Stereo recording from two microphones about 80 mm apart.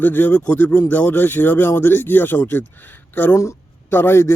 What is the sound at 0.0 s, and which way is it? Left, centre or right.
A man's voice, left.